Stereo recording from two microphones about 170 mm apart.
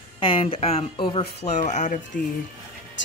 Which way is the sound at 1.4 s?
45° left (ahead or behind).